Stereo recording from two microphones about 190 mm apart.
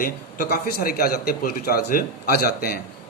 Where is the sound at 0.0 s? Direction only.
50° left (ahead or behind).